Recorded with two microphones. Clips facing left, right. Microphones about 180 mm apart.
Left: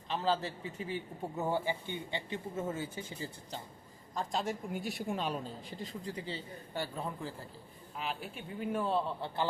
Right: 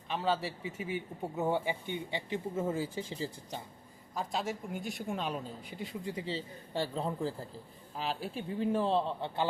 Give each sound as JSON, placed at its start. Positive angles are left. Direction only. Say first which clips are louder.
{"t": 0.1, "sound": "a man's voice", "louder": "even", "side_deg": -5}
{"t": 0.9, "sound": "speech", "louder": "right 2 dB", "side_deg": -15}
{"t": 2.3, "sound": "speech", "louder": "right 5 dB", "side_deg": -30}
{"t": 4.1, "sound": "a man's voice", "louder": "even", "side_deg": -5}
{"t": 5.7, "sound": "speech", "louder": "right 4 dB", "side_deg": -20}